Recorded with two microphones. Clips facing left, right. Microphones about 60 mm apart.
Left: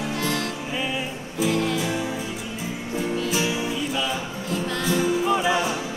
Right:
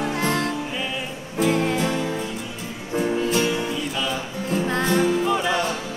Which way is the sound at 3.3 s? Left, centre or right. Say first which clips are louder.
Right 2 dB; centre.